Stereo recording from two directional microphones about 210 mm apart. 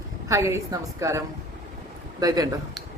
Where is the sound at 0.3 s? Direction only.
15° right (ahead or behind).